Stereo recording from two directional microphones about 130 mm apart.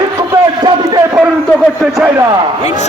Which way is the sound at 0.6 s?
30° right (ahead or behind).